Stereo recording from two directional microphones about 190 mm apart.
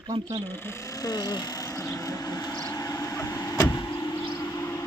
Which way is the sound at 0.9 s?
20° left (ahead or behind).